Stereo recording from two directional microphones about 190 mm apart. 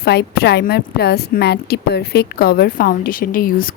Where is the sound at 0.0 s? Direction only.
60° left (ahead or behind).